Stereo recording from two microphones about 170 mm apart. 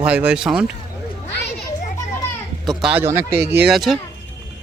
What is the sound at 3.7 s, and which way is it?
Speech, centre (ahead or behind).